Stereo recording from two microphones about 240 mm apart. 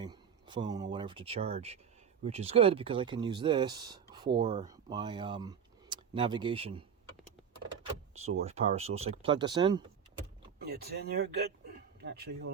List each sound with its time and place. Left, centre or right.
0.0 s speech: centre
8.4 s speech: right
10.6 s speech: right